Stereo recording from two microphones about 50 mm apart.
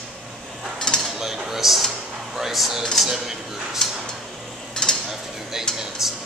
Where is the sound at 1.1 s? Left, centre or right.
Centre.